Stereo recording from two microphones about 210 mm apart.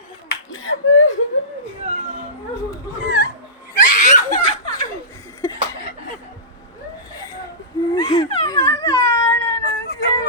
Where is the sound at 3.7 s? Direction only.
40° left (ahead or behind).